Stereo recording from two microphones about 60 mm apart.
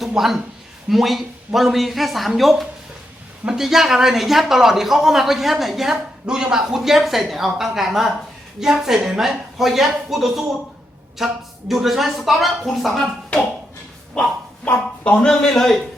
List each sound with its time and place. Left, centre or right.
0.2 s speech: centre
15.0 s speech: centre
15.3 s a man's voice: centre